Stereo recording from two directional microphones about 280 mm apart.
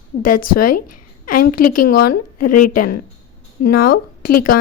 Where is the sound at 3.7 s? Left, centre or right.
Left.